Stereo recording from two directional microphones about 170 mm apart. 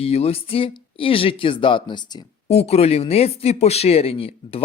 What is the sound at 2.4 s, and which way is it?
A woman's voice, 40° left (ahead or behind).